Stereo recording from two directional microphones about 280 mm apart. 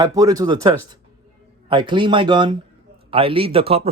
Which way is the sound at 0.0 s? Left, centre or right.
Centre.